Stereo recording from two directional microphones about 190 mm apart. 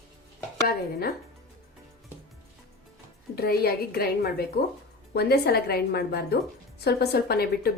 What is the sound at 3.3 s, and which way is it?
A woman's voice, 55° left (ahead or behind).